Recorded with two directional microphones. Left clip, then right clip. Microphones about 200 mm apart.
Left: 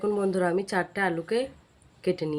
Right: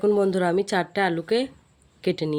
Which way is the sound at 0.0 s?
50° right (ahead or behind).